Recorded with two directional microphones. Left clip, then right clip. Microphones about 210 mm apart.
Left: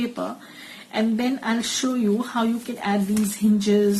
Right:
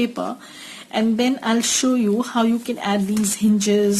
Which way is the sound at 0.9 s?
45° right (ahead or behind).